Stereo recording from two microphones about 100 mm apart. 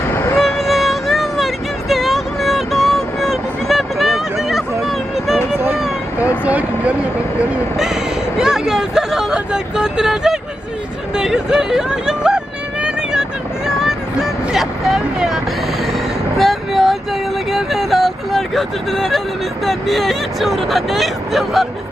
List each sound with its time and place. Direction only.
0.1 s music: 25° left (ahead or behind)
0.3 s music: centre (ahead or behind)
1.9 s vehicle: centre (ahead or behind)
6.4 s a sound: 15° right (ahead or behind)
12.8 s vehicle: 10° right (ahead or behind)
16.4 s vehicle: centre (ahead or behind)
17.5 s a sound: centre (ahead or behind)
19.6 s speech: centre (ahead or behind)